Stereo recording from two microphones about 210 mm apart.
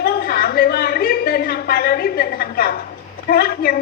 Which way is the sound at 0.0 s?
45° left (ahead or behind).